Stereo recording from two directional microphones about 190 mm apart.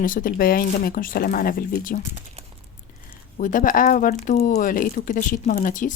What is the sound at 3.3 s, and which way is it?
Speech, 45° left (ahead or behind).